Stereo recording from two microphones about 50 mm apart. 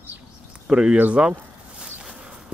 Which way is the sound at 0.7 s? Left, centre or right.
Centre.